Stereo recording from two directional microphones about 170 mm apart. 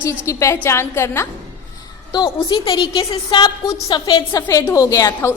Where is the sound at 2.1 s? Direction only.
25° left (ahead or behind).